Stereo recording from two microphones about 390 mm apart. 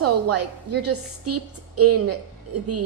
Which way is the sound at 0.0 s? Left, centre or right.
Right.